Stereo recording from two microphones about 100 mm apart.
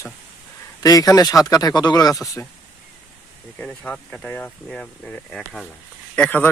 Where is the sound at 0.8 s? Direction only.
35° left (ahead or behind).